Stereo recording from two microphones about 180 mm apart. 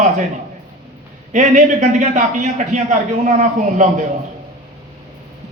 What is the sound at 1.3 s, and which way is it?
A man's voice, 45° right (ahead or behind).